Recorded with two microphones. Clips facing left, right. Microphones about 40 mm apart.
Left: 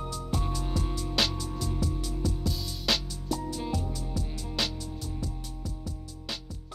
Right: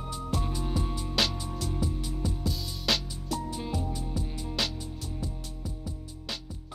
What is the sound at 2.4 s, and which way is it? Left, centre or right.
Music, centre.